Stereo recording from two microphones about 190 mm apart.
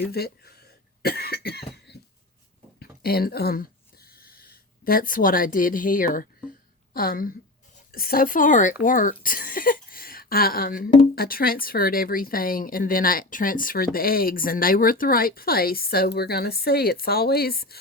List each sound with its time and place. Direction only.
0.1 s speech: 55° left (ahead or behind)
1.0 s cough: 55° left (ahead or behind)
2.7 s a sound: 55° left (ahead or behind)
6.9 s speech: 50° left (ahead or behind)